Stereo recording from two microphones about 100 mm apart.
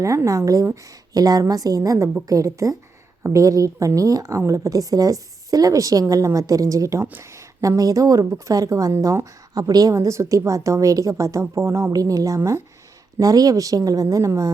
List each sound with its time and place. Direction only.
0.0 s a woman's voice: 30° right (ahead or behind)
13.1 s a woman's voice: 40° right (ahead or behind)